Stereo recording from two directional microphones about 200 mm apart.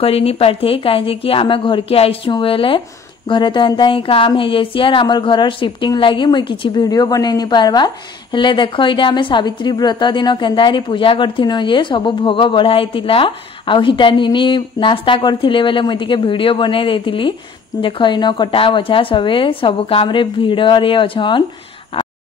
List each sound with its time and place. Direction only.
0.0 s speech: 30° left (ahead or behind)